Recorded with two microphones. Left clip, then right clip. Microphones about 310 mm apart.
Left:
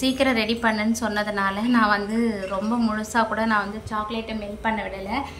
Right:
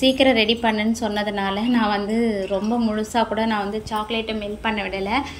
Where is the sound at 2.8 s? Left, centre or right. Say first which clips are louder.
Right 1 dB; centre.